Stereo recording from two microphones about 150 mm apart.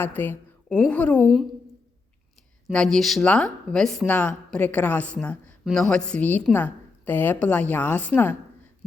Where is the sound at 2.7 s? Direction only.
5° left (ahead or behind).